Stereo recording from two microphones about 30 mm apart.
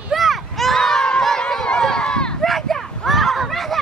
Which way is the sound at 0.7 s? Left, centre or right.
Left.